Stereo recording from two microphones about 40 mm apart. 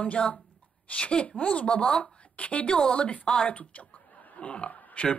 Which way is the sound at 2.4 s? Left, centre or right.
Left.